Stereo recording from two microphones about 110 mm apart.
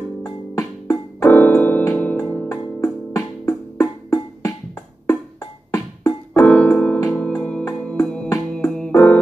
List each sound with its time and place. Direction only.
0.2 s music: 35° left (ahead or behind)
1.2 s music: 15° left (ahead or behind)
5.7 s music: 30° left (ahead or behind)
6.4 s keyboard: 10° left (ahead or behind)
7.2 s music: 10° left (ahead or behind)